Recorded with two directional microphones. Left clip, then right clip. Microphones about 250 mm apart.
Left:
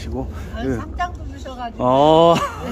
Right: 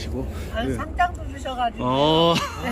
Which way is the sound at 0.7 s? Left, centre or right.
Centre.